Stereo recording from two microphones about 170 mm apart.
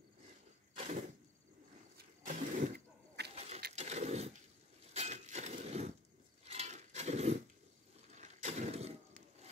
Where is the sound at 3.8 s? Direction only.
40° right (ahead or behind).